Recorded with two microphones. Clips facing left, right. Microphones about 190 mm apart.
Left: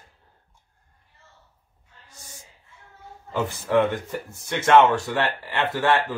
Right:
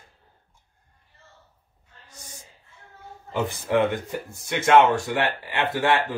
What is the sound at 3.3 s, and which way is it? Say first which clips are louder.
Speech: left 1 dB; 15° right (ahead or behind).